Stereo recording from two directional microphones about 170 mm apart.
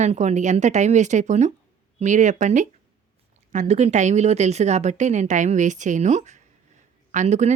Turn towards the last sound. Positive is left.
turn(degrees=-40)  # may be behind; listen again after turning